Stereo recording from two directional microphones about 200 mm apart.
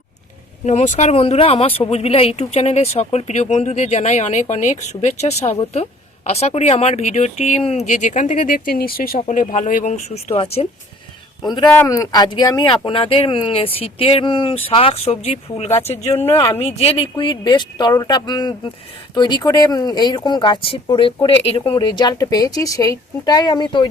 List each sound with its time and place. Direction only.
0.6 s speech: 35° left (ahead or behind)